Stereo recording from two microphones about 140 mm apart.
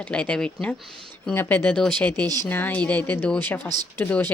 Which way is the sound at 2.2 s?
30° right (ahead or behind).